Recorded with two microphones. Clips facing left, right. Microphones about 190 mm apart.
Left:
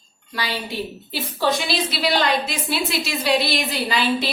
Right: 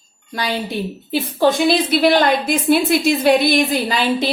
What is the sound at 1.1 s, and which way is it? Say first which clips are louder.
A woman's voice: right 7 dB; 50° right (ahead or behind).